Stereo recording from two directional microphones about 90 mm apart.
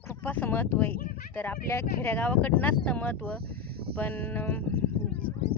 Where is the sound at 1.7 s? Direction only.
35° left (ahead or behind).